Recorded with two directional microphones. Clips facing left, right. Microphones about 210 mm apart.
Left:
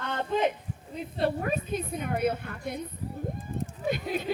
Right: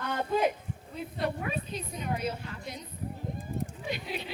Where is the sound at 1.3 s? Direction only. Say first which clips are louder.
Left 7 dB; 45° left (ahead or behind).